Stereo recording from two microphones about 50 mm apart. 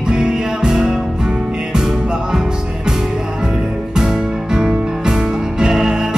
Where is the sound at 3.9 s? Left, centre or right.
Centre.